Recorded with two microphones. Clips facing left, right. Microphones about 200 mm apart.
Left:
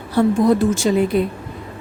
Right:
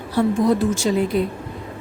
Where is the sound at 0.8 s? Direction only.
60° left (ahead or behind).